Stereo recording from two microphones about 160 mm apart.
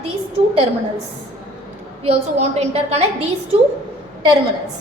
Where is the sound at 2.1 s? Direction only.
40° right (ahead or behind).